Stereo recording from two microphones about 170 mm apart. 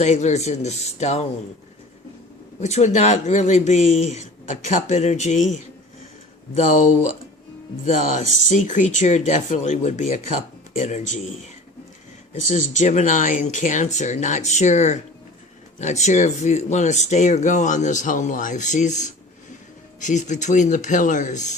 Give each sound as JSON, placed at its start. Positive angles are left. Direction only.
{"t": 0.0, "sound": "speech", "side_deg": 45}
{"t": 2.6, "sound": "speech", "side_deg": 40}
{"t": 7.9, "sound": "speech", "side_deg": 45}
{"t": 12.3, "sound": "speech", "side_deg": 45}